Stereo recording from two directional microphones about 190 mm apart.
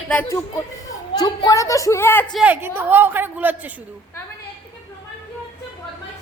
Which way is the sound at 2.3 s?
10° right (ahead or behind).